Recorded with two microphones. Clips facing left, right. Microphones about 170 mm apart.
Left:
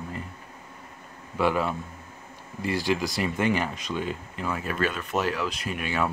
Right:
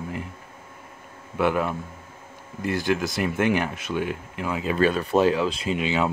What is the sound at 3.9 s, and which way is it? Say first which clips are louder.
Speech: right 5 dB; 70° right (ahead or behind).